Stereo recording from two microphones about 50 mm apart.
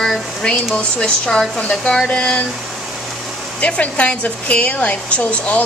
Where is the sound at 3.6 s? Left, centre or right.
Left.